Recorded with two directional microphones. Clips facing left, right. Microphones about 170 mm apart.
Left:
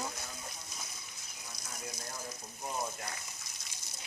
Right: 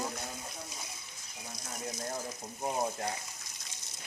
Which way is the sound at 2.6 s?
40° right (ahead or behind).